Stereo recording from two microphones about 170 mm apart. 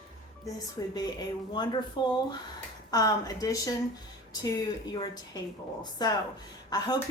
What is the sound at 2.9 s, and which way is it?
Speech, 20° left (ahead or behind).